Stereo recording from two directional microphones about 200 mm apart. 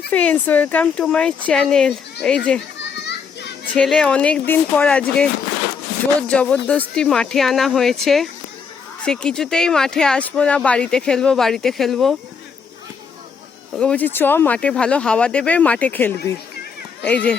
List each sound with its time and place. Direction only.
0.1 s speech: 10° left (ahead or behind)
3.0 s children playing: 60° left (ahead or behind)
3.8 s speech: 5° left (ahead or behind)
13.7 s speech: 5° left (ahead or behind)